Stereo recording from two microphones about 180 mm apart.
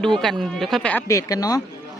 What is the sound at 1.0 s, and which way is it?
Speech, 20° left (ahead or behind).